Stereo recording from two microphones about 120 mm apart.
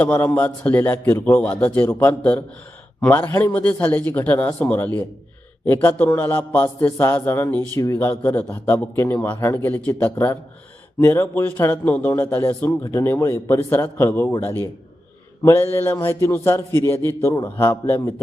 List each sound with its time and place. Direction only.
0.0 s a man's voice: 15° left (ahead or behind)
15.4 s a man's voice: 20° left (ahead or behind)